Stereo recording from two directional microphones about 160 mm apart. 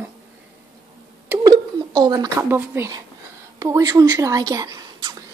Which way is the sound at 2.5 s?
15° right (ahead or behind).